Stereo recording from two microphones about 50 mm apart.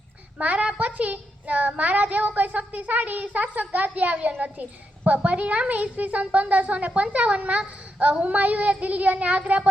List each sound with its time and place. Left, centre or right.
0.3 s a woman's voice: right